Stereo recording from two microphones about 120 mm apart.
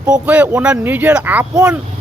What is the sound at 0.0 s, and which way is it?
Speech, 10° right (ahead or behind).